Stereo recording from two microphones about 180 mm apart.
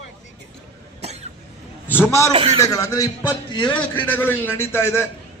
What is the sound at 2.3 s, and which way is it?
Speech, 35° right (ahead or behind).